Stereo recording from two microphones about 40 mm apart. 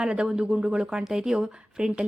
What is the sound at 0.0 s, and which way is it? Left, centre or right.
Speech, right.